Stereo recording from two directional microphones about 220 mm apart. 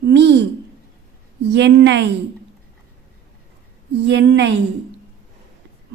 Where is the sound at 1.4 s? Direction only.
50° right (ahead or behind).